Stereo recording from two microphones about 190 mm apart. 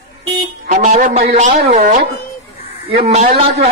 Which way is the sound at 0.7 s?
40° right (ahead or behind).